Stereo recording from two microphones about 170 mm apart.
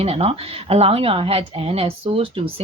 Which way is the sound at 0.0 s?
35° right (ahead or behind).